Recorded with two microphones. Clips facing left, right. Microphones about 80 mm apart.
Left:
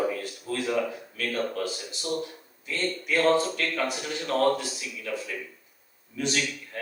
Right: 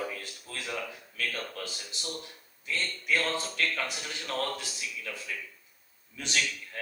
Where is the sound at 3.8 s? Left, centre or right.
Left.